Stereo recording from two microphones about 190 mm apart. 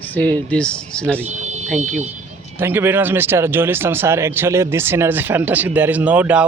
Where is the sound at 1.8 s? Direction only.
35° right (ahead or behind).